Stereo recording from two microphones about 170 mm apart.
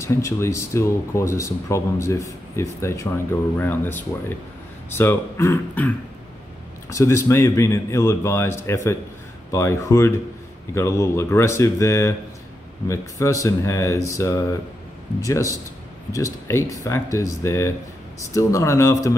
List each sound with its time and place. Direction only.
0.0 s a man's voice: 15° left (ahead or behind)